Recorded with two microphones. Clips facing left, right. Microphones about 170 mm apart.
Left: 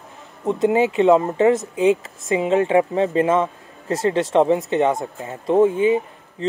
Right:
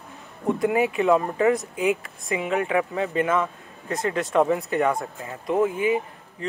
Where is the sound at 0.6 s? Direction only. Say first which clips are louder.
Left 6 dB; 25° left (ahead or behind).